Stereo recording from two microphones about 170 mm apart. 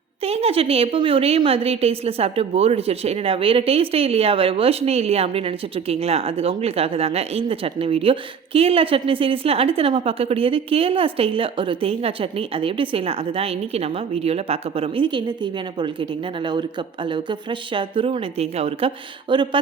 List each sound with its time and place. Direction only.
0.3 s a woman's voice: 35° right (ahead or behind)
17.1 s a woman's voice: 30° right (ahead or behind)